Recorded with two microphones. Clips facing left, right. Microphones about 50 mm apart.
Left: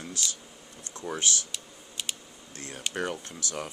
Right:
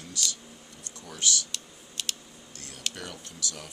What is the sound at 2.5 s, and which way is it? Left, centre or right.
Speech, left.